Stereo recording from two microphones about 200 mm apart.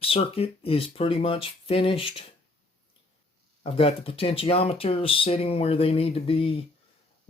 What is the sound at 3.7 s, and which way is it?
Speech, 30° left (ahead or behind).